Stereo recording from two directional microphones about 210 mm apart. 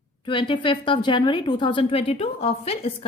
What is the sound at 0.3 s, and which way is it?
A woman's voice, 25° left (ahead or behind).